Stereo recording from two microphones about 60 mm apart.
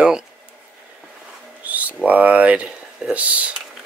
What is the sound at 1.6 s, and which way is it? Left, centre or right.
Speech, right.